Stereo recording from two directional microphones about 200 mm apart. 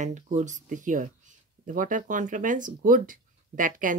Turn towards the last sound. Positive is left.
turn(degrees=-40)  # may be behind; listen again after turning